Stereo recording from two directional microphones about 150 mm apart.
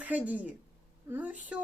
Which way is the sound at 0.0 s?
10° right (ahead or behind).